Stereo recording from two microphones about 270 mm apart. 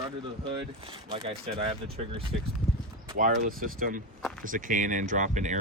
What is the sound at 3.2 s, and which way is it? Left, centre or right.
Speech, right.